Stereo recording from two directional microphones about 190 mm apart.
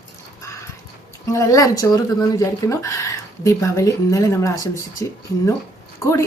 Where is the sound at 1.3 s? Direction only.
15° left (ahead or behind).